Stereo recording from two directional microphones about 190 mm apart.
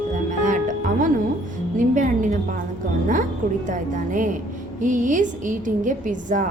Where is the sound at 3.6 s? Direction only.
40° right (ahead or behind).